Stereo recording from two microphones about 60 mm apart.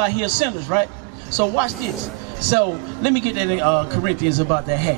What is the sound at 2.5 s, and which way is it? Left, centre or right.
A man's voice, centre.